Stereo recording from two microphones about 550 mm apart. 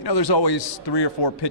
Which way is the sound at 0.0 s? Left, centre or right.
Left.